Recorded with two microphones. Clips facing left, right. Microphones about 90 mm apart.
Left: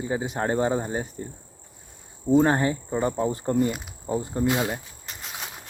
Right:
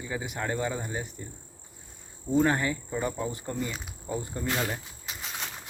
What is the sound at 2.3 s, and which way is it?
Speech, 35° left (ahead or behind).